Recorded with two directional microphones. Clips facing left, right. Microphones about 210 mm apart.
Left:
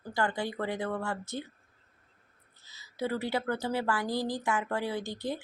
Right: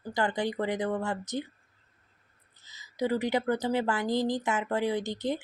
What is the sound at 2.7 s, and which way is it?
A woman's voice, 15° right (ahead or behind).